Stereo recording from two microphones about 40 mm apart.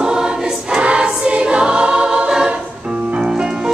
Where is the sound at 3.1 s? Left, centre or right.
Right.